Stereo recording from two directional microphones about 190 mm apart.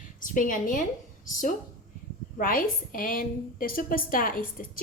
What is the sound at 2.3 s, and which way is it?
Speech, 50° left (ahead or behind).